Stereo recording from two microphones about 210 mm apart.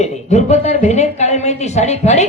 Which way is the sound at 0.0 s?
30° left (ahead or behind).